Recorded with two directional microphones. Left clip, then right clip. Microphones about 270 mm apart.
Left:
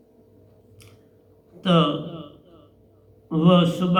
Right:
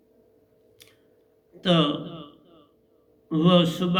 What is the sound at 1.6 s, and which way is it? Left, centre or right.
Speech, right.